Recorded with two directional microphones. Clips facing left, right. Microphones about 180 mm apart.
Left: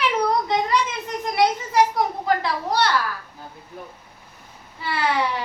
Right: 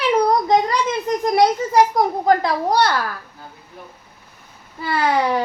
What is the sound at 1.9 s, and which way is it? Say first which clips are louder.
A child's voice: right 5 dB; 40° right (ahead or behind).